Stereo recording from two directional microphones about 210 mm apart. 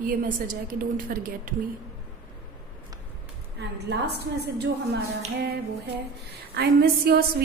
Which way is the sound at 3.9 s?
50° right (ahead or behind).